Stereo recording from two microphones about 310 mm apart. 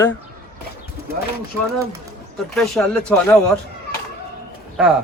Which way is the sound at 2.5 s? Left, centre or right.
Centre.